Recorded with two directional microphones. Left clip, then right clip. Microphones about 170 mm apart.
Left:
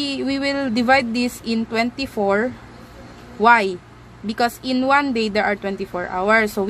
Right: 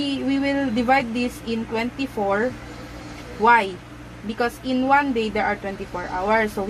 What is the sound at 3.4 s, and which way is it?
Speech, 75° left (ahead or behind).